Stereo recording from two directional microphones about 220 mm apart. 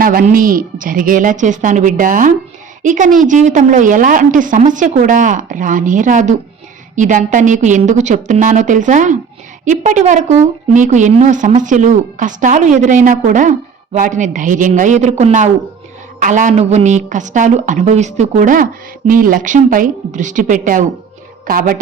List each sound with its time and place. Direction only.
0.0 s a woman's voice: 40° right (ahead or behind)